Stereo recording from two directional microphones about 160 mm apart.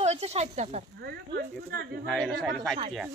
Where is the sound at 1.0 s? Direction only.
80° right.